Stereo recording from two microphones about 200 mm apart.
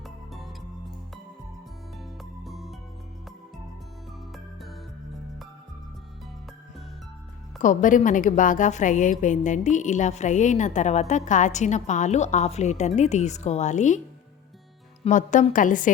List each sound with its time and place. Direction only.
0.0 s music: centre (ahead or behind)
2.4 s music: centre (ahead or behind)
7.6 s a woman's voice: 40° left (ahead or behind)
15.0 s a woman's voice: 40° left (ahead or behind)